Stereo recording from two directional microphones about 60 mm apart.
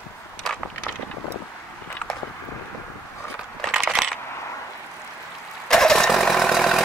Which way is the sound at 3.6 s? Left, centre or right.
Centre.